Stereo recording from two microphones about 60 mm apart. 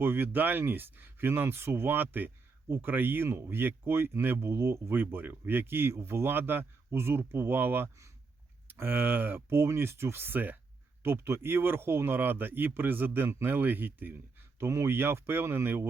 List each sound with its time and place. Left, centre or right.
0.0 s speech: right
11.0 s speech: right
14.6 s speech: right
14.8 s speech: right